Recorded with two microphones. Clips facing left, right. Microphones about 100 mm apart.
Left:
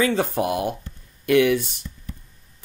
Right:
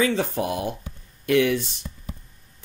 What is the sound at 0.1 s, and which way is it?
Speech, 55° left (ahead or behind).